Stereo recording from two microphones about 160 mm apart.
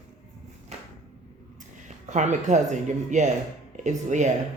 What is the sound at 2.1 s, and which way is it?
Speech, 50° right (ahead or behind).